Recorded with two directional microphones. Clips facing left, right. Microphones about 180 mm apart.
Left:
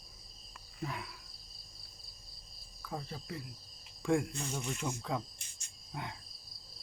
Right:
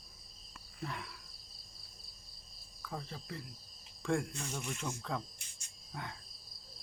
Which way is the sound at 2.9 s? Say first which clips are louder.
Left 2 dB; 5° left (ahead or behind).